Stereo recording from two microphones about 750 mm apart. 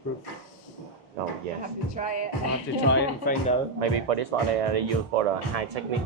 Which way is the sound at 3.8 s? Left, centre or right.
Right.